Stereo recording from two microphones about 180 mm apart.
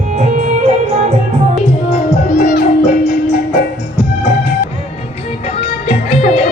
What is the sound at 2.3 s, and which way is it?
Music, 50° left (ahead or behind).